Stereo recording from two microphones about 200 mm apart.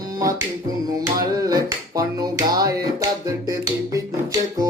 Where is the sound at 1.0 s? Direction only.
15° right (ahead or behind).